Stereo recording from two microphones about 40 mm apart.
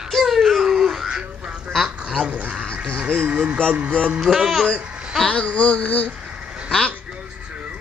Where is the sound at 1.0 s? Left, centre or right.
Right.